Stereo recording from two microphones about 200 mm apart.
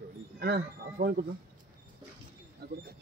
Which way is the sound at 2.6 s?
50° right (ahead or behind).